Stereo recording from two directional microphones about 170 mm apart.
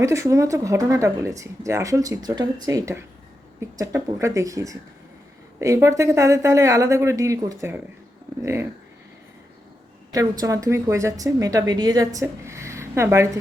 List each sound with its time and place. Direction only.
0.0 s speech: 15° right (ahead or behind)
10.1 s speech: 20° right (ahead or behind)